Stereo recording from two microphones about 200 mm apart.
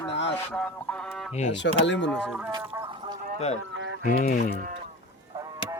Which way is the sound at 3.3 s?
35° left (ahead or behind).